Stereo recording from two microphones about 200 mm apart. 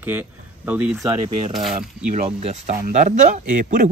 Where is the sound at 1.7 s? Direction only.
35° right (ahead or behind).